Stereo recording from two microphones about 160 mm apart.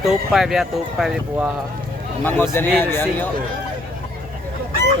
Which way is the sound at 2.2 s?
10° left (ahead or behind).